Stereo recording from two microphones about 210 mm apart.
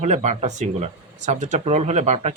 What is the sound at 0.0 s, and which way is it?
Speech, 35° right (ahead or behind).